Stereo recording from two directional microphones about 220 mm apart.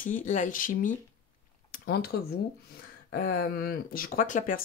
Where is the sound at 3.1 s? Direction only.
45° left (ahead or behind).